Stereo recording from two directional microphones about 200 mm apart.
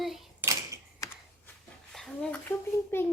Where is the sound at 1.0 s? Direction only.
15° left (ahead or behind).